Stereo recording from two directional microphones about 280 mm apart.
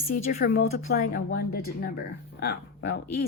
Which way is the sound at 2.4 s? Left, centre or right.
Left.